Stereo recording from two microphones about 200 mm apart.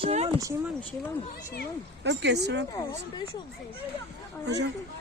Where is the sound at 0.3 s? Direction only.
15° right (ahead or behind).